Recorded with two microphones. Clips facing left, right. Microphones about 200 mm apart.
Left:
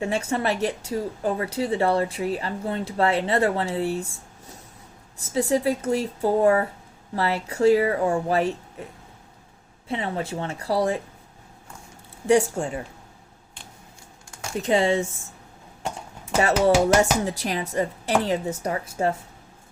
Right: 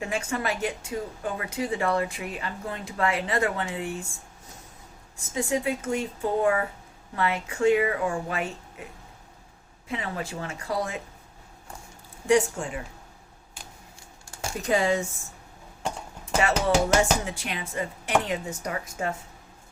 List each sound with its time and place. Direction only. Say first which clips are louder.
0.0 s speech: left 5 dB; 30° left (ahead or behind)
5.2 s speech: left 5 dB; 35° left (ahead or behind)
9.9 s speech: left 4 dB; 30° left (ahead or behind)
12.3 s speech: left 3 dB; 35° left (ahead or behind)
14.6 s speech: left 3 dB; 25° left (ahead or behind)
16.4 s speech: left 5 dB; 35° left (ahead or behind)